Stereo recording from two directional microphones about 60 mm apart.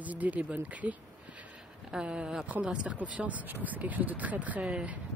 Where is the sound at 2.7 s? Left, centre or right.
Right.